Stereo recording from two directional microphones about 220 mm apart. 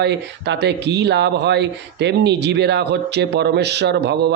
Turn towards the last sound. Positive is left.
turn(degrees=-50)  # may be behind; listen again after turning